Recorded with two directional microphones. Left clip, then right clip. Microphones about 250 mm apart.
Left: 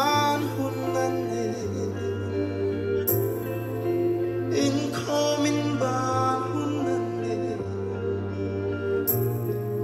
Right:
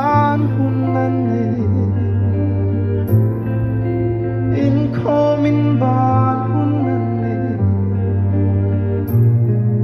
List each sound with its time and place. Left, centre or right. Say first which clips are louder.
0.0 s music: right 7 dB; left
4.6 s music: right 7 dB; left